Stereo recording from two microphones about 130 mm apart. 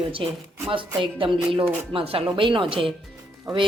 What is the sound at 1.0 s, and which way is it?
Speech, 45° right (ahead or behind).